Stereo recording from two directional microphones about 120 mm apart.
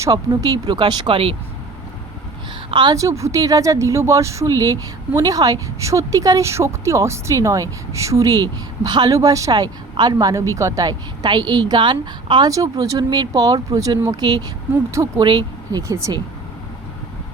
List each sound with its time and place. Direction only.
0.0 s speech: 30° right (ahead or behind)
0.6 s speech: 40° right (ahead or behind)
2.6 s a woman's voice: 40° right (ahead or behind)
2.9 s speech: 25° right (ahead or behind)
12.5 s speech: 30° right (ahead or behind)
15.9 s speech: 25° right (ahead or behind)